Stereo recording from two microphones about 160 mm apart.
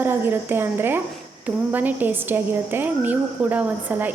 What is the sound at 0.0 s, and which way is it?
A woman's voice, 15° right (ahead or behind).